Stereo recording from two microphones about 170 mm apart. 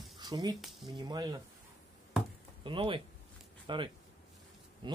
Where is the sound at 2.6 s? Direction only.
30° right (ahead or behind).